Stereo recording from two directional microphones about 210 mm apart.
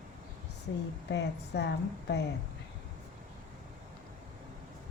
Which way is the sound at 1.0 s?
55° left (ahead or behind).